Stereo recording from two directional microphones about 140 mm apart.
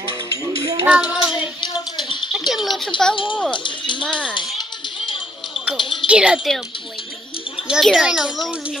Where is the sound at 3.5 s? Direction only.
35° left (ahead or behind).